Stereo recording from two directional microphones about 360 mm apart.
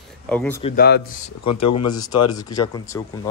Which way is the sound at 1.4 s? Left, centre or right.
Left.